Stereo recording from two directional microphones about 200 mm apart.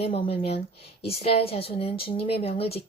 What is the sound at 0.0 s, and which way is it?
A woman's voice, 30° left (ahead or behind).